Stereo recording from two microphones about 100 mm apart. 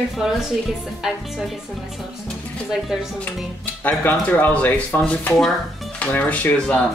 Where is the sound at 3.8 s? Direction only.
20° left (ahead or behind).